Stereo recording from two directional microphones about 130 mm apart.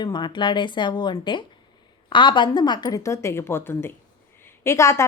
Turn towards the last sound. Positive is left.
turn(degrees=20)  # may be behind; listen again after turning